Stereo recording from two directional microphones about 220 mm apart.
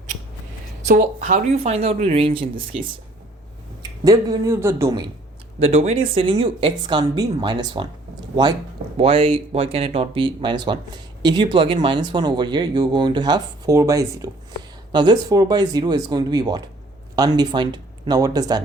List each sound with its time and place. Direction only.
0.9 s speech: 35° right (ahead or behind)
4.0 s speech: 15° right (ahead or behind)
5.5 s speech: 30° right (ahead or behind)
9.0 s speech: 25° right (ahead or behind)